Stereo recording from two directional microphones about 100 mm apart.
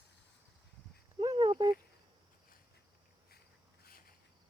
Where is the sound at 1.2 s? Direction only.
40° right (ahead or behind).